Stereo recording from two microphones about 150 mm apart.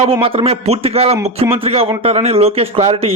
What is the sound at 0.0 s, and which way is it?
A man's voice, 40° right (ahead or behind).